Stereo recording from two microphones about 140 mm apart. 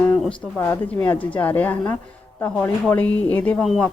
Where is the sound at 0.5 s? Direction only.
15° left (ahead or behind).